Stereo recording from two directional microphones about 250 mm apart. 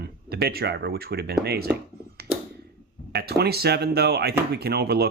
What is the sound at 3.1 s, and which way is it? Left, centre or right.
Speech, right.